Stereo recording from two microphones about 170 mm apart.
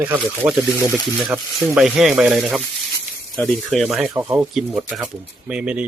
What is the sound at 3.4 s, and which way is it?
Speech, 10° left (ahead or behind).